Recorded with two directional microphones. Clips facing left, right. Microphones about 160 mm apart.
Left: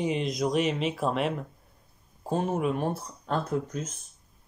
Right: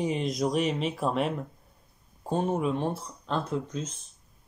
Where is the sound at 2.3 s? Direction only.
5° left (ahead or behind).